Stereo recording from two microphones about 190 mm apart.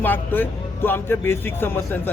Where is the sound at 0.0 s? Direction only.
10° left (ahead or behind).